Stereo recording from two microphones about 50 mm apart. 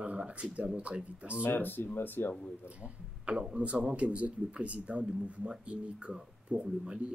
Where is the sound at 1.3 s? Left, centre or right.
Left.